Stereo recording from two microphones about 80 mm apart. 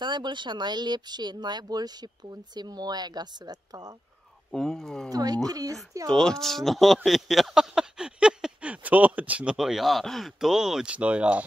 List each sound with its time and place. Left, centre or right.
0.0 s speech: right
4.5 s speech: centre
5.1 s speech: right
6.0 s speech: centre